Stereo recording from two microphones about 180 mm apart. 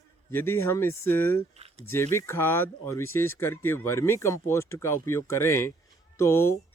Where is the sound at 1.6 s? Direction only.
35° right (ahead or behind).